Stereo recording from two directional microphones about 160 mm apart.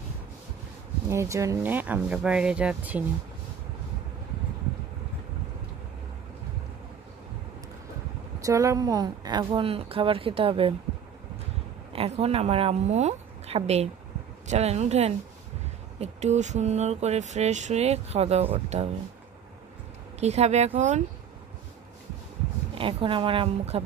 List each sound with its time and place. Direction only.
1.0 s speech: 15° right (ahead or behind)
8.4 s a woman's voice: 20° right (ahead or behind)
11.9 s a woman's voice: 40° right (ahead or behind)
20.2 s speech: 45° right (ahead or behind)
22.8 s a woman's voice: 35° right (ahead or behind)